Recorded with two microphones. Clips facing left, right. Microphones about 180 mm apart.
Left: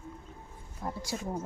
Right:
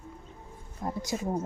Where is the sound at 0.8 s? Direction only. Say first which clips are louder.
Right 4 dB; 20° right (ahead or behind).